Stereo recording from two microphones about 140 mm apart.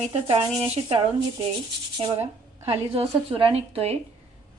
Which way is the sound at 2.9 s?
45° right (ahead or behind).